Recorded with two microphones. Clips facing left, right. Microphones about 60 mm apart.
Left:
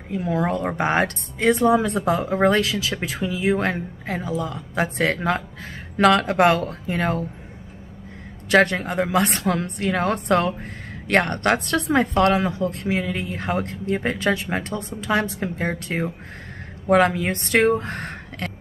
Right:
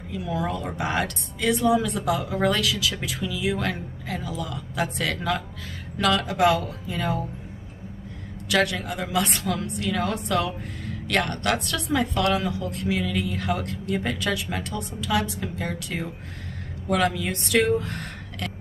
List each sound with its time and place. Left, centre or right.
0.1 s a woman's voice: left
8.5 s a woman's voice: left